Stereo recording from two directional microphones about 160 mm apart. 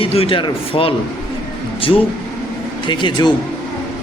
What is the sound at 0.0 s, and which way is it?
A man's voice, 35° left (ahead or behind).